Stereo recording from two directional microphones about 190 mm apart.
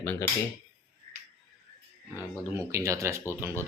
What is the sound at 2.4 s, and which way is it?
Speech, 15° right (ahead or behind).